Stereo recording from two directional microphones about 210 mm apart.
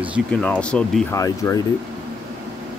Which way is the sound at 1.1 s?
15° left (ahead or behind).